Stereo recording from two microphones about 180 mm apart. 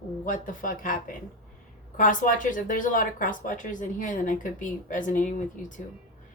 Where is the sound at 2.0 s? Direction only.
45° left (ahead or behind).